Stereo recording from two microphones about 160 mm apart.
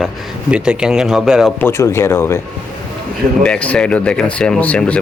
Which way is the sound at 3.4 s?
5° left (ahead or behind).